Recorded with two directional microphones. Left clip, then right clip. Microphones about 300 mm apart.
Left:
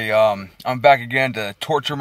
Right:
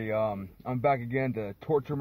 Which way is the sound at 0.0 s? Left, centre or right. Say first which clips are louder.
Left 14 dB; centre.